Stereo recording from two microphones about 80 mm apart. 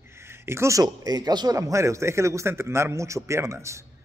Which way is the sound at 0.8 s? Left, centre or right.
Right.